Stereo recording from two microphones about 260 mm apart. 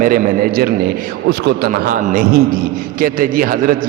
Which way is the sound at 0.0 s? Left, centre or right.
Right.